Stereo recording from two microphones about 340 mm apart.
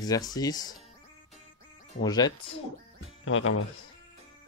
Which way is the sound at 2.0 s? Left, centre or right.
Centre.